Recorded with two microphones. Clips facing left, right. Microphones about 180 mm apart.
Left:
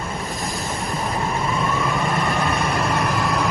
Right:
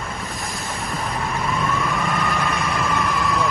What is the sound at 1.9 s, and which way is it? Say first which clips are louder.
Vehicle: left 1 dB; 35° left (ahead or behind).